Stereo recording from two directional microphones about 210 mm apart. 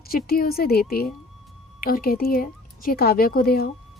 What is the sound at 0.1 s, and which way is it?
A woman's voice, 45° left (ahead or behind).